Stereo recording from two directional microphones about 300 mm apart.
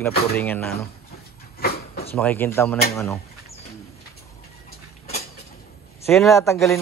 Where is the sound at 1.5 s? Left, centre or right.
Left.